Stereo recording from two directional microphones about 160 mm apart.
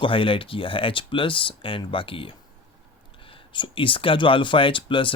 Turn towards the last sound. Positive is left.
turn(degrees=30)  # may be behind; listen again after turning